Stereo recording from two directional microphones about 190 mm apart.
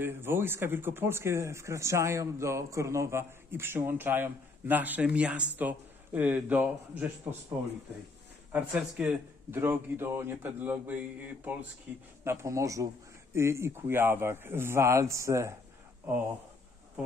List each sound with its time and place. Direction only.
0.0 s speech: 10° right (ahead or behind)
8.7 s speech: 5° right (ahead or behind)